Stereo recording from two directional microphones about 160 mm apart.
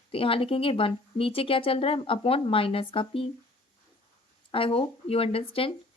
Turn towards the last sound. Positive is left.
turn(degrees=35)  # may be behind; listen again after turning